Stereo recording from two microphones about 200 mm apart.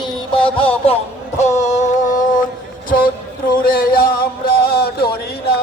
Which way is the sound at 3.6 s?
50° left (ahead or behind).